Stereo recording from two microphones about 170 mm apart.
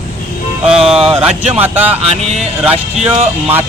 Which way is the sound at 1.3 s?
40° right (ahead or behind).